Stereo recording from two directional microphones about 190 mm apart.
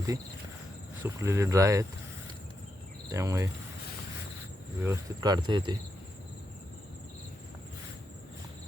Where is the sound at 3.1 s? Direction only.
15° right (ahead or behind).